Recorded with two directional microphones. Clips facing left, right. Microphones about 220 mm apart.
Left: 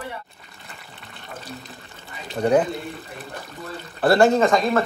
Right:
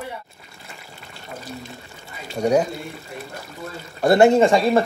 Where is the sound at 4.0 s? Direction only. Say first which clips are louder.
Right 2 dB; 20° right (ahead or behind).